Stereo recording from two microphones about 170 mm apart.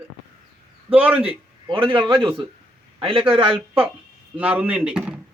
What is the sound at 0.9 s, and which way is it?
Speech, 10° right (ahead or behind).